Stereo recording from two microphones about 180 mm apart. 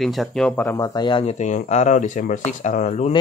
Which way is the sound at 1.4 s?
40° left (ahead or behind).